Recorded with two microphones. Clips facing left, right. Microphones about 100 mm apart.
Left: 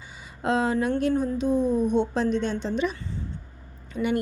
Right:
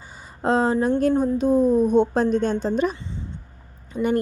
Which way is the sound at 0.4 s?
35° right (ahead or behind).